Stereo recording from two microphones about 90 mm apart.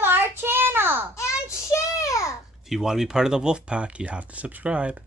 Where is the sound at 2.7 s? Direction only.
5° right (ahead or behind).